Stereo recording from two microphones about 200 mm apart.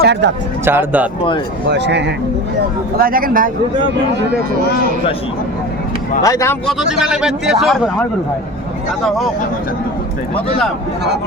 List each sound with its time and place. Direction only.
0.0 s speech: 60° right (ahead or behind)
0.6 s speech: 10° right (ahead or behind)
1.7 s speech: 60° right (ahead or behind)
3.0 s speech: 45° right (ahead or behind)
6.2 s speech: 15° left (ahead or behind)
6.7 s speech: 5° right (ahead or behind)
9.0 s speech: centre (ahead or behind)